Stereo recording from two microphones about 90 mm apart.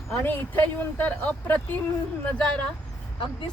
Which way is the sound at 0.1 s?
20° left (ahead or behind).